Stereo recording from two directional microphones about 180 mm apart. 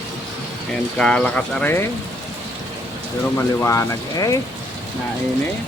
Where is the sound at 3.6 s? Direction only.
15° left (ahead or behind).